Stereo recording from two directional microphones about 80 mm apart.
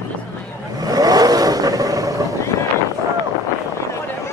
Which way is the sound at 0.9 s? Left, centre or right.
Right.